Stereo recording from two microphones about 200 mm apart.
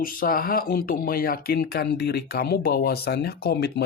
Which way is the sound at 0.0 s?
45° left (ahead or behind).